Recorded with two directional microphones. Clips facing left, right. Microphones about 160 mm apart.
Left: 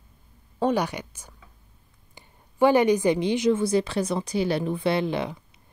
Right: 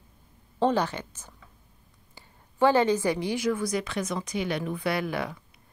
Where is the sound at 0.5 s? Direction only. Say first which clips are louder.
Left 1 dB; 10° left (ahead or behind).